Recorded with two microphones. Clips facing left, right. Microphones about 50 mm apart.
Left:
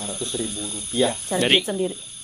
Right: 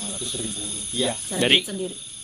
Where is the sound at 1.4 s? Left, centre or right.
Centre.